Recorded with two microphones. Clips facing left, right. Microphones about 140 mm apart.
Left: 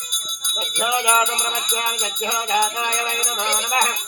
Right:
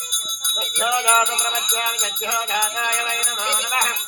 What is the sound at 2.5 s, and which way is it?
Music, 20° left (ahead or behind).